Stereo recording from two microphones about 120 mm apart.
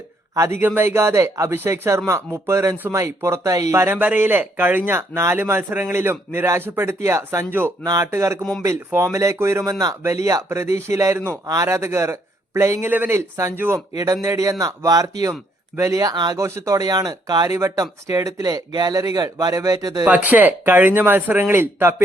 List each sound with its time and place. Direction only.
0.3 s speech: 20° right (ahead or behind)
20.1 s speech: 15° right (ahead or behind)